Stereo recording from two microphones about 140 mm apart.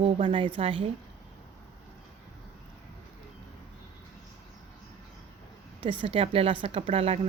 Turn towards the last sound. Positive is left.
turn(degrees=-45)  # may be behind; listen again after turning